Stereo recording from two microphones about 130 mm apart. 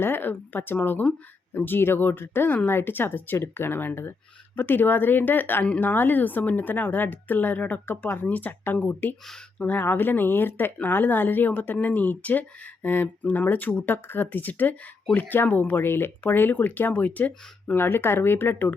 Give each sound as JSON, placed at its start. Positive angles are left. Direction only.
{"t": 0.0, "sound": "speech", "side_deg": 15}
{"t": 9.2, "sound": "speech", "side_deg": 5}
{"t": 9.6, "sound": "speech", "side_deg": 15}